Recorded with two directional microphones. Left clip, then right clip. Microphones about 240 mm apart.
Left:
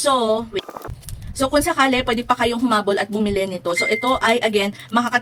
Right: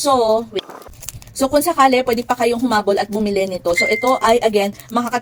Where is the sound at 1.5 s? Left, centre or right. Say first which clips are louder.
Right 4 dB; centre.